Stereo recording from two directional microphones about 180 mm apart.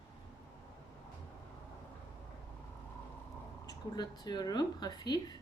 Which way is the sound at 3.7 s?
25° left (ahead or behind).